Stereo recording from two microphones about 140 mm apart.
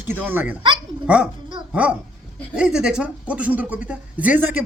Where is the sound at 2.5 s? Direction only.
5° right (ahead or behind).